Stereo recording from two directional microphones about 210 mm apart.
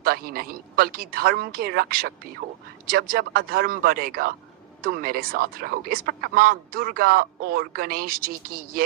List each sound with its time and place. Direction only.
0.0 s speech: 45° right (ahead or behind)